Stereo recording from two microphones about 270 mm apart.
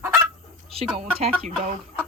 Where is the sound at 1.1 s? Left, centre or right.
Right.